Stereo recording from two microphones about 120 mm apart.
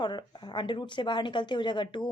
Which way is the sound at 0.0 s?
40° left (ahead or behind).